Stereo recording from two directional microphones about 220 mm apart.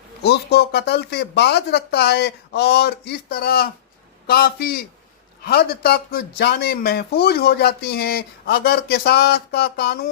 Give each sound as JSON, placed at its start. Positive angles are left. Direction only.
{"t": 0.2, "sound": "speech", "side_deg": 50}